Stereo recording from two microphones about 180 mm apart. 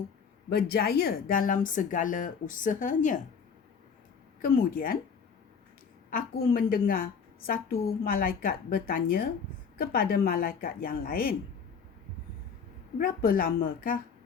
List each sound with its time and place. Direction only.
0.5 s a woman's voice: 60° left (ahead or behind)
4.4 s a woman's voice: 50° left (ahead or behind)
6.1 s a woman's voice: 55° left (ahead or behind)
13.0 s a woman's voice: 55° left (ahead or behind)